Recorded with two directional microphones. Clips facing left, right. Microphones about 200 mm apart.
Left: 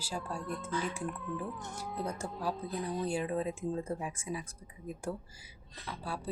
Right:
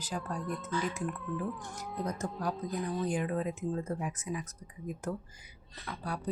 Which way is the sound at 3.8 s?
15° left (ahead or behind).